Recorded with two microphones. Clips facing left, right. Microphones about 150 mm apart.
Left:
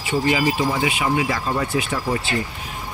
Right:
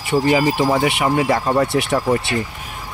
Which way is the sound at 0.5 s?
60° right (ahead or behind).